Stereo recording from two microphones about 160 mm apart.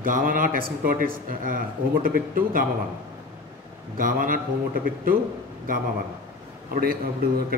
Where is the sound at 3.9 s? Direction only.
60° right (ahead or behind).